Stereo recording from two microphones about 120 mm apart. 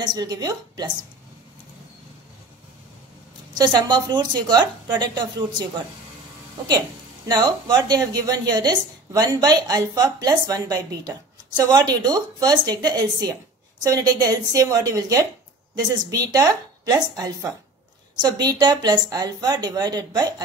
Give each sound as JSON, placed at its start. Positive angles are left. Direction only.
{"t": 0.0, "sound": "a woman's voice", "side_deg": -35}
{"t": 3.7, "sound": "a woman's voice", "side_deg": -35}
{"t": 7.2, "sound": "a woman's voice", "side_deg": -35}
{"t": 18.2, "sound": "a woman's voice", "side_deg": -35}